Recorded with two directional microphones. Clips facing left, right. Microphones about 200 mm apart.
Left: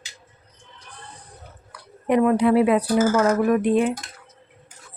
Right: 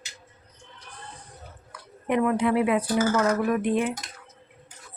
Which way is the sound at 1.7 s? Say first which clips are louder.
Left 5 dB; 35° left (ahead or behind).